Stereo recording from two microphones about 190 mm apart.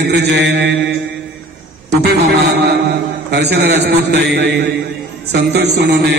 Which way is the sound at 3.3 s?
60° right (ahead or behind).